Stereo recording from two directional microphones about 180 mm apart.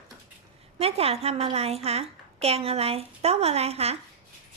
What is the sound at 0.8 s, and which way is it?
A woman's voice, 35° right (ahead or behind).